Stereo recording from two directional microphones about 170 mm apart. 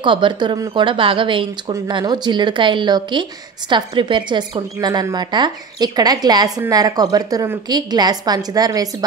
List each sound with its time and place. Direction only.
0.0 s speech: 30° right (ahead or behind)